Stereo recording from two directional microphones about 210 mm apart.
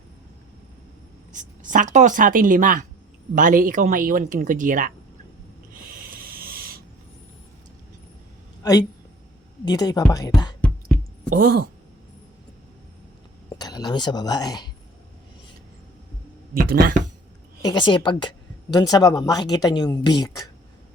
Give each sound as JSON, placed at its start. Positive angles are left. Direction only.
{"t": 1.3, "sound": "speech", "side_deg": -40}
{"t": 6.1, "sound": "hiss", "side_deg": -45}
{"t": 8.6, "sound": "speech", "side_deg": 15}
{"t": 11.3, "sound": "speech", "side_deg": -45}
{"t": 13.6, "sound": "a woman's voice", "side_deg": 20}
{"t": 17.6, "sound": "a woman's voice", "side_deg": 20}